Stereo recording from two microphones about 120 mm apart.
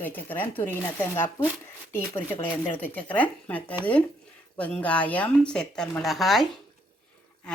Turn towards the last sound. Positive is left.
turn(degrees=0)  # may be behind; listen again after turning